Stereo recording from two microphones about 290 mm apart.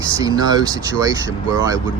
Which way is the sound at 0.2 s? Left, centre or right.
Centre.